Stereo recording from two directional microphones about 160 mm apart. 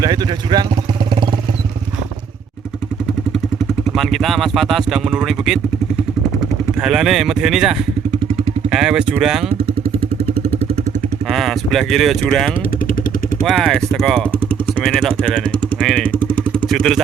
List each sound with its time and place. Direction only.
0.0 s vehicle: 25° right (ahead or behind)
3.9 s speech: centre (ahead or behind)
6.8 s speech: 5° right (ahead or behind)
11.3 s speech: centre (ahead or behind)
16.1 s vehicle: 10° left (ahead or behind)